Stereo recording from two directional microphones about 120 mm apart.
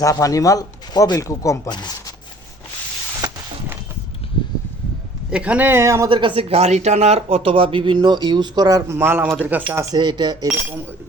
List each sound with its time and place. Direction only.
0.0 s speech: 30° left (ahead or behind)
5.3 s speech: 10° right (ahead or behind)
6.1 s speech: 45° right (ahead or behind); by 9.8 s 15° right (ahead or behind)
9.8 s speech: 35° right (ahead or behind)